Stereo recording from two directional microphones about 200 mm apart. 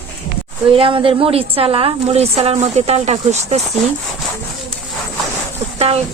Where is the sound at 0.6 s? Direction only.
25° right (ahead or behind).